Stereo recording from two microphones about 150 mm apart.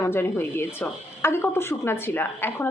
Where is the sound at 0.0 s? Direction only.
15° left (ahead or behind).